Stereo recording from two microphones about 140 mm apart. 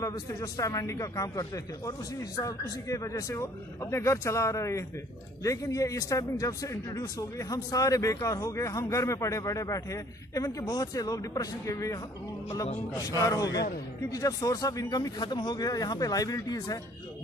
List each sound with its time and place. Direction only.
0.0 s speech: 25° left (ahead or behind)